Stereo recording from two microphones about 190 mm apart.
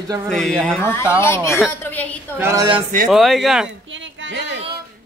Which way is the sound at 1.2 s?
15° left (ahead or behind).